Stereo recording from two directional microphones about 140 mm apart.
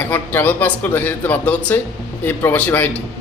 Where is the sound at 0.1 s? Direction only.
15° left (ahead or behind).